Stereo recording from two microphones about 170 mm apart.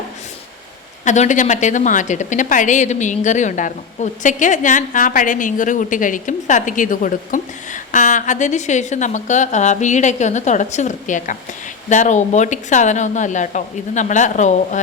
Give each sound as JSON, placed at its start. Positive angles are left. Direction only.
{"t": 1.0, "sound": "a woman's voice", "side_deg": 45}